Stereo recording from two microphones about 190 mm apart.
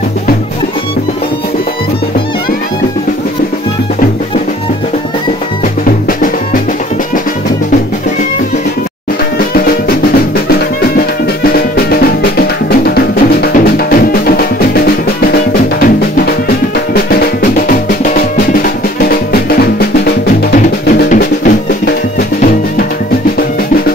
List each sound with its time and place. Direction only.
6.0 s music: 45° left (ahead or behind)
11.4 s music: 55° left (ahead or behind)
16.3 s music: 55° left (ahead or behind)
20.9 s drum: 50° left (ahead or behind)